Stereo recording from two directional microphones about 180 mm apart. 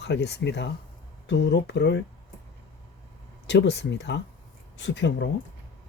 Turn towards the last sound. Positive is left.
turn(degrees=80)